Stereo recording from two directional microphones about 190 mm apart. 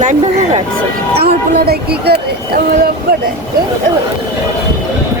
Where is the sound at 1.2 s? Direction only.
55° right (ahead or behind).